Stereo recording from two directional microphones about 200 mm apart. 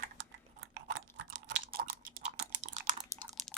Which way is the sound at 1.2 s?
65° right (ahead or behind).